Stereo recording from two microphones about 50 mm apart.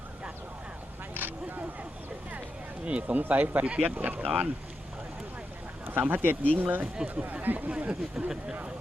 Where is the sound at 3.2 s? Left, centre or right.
Right.